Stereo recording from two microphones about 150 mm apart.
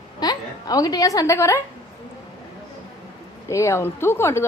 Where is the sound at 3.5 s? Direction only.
20° left (ahead or behind).